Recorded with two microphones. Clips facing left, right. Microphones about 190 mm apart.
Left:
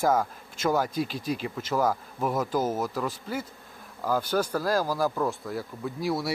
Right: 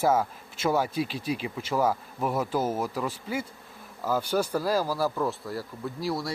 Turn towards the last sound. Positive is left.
turn(degrees=0)  # may be behind; listen again after turning